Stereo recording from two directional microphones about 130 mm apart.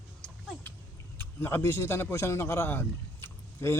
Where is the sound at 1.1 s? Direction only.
15° left (ahead or behind).